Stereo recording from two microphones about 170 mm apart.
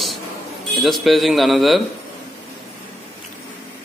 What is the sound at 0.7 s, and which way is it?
A man's voice, centre (ahead or behind).